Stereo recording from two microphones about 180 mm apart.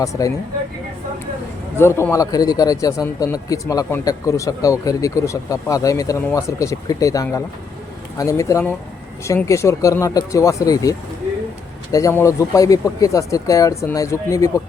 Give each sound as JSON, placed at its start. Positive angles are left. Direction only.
{"t": 0.0, "sound": "speech", "side_deg": 20}
{"t": 1.8, "sound": "a man's voice", "side_deg": 15}